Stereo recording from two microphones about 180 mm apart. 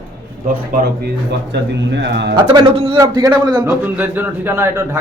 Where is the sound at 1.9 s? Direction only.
75° right (ahead or behind).